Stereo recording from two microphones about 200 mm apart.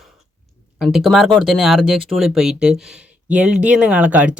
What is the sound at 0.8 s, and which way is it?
Speech, 5° right (ahead or behind).